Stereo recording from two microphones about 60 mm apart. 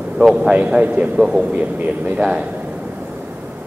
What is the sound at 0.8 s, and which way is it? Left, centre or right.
Speech, right.